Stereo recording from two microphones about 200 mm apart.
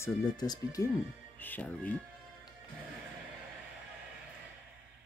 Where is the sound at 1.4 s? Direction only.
10° left (ahead or behind).